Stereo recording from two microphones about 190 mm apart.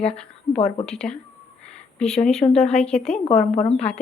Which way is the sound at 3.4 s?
35° left (ahead or behind).